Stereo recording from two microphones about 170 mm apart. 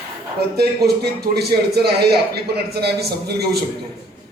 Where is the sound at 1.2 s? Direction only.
70° right (ahead or behind).